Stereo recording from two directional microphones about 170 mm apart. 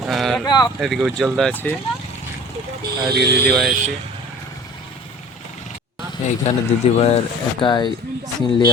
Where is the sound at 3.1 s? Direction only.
70° right (ahead or behind).